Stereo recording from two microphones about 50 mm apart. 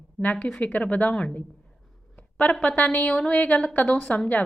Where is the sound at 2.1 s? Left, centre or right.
Left.